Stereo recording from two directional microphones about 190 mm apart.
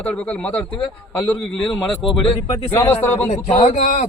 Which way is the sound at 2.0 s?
25° left (ahead or behind).